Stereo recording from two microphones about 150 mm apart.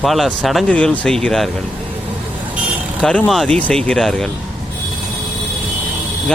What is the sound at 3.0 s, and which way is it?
Speech, 5° left (ahead or behind).